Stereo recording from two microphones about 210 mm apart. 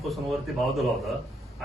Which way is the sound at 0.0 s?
Centre (ahead or behind).